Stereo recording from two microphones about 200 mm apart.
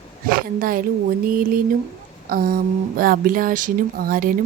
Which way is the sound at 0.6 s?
45° right (ahead or behind).